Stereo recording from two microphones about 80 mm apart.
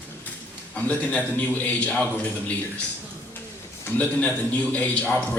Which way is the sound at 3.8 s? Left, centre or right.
Centre.